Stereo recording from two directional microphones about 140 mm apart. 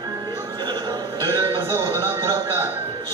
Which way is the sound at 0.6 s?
30° right (ahead or behind).